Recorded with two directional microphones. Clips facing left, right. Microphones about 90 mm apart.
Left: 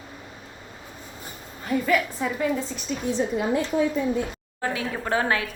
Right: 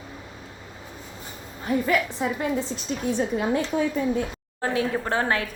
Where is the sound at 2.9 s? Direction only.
50° right (ahead or behind).